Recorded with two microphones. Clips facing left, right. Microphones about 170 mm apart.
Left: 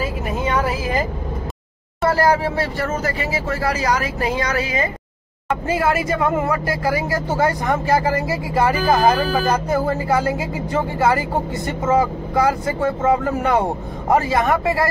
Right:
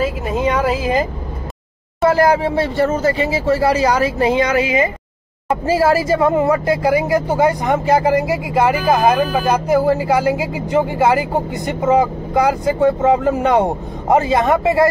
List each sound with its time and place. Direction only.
0.3 s a sound: 20° right (ahead or behind)
2.4 s speech: 25° right (ahead or behind)
5.5 s speech: 30° right (ahead or behind)
6.3 s speech: 20° right (ahead or behind)